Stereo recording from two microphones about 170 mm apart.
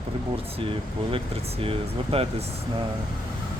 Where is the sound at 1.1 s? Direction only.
35° right (ahead or behind).